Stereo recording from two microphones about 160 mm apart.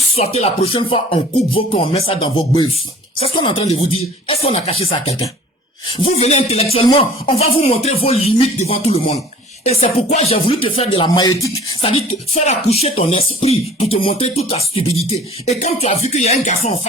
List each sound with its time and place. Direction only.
0.2 s speech: 40° left (ahead or behind); by 11.5 s 20° left (ahead or behind)
11.8 s speech: 40° left (ahead or behind)
15.4 s music: 45° left (ahead or behind)